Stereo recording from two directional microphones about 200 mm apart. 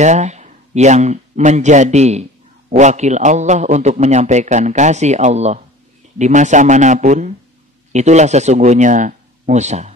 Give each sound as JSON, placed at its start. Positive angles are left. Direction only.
{"t": 0.0, "sound": "a man's voice", "side_deg": -35}